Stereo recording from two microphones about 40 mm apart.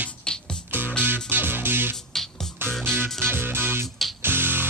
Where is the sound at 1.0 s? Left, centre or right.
Right.